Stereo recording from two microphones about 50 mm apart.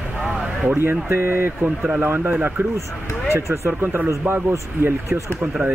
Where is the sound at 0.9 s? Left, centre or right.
Right.